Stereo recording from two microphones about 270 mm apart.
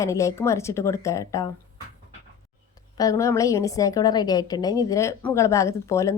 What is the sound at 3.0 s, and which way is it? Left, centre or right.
A woman's voice, centre.